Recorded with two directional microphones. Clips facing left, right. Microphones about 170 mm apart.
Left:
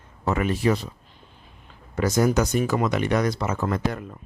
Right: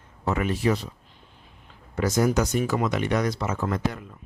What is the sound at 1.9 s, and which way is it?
Speech, 50° left (ahead or behind).